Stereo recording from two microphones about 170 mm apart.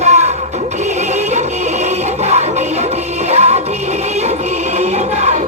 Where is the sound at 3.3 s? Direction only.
40° right (ahead or behind).